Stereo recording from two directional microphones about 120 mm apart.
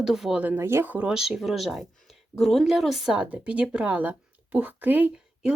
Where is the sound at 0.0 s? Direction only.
5° right (ahead or behind).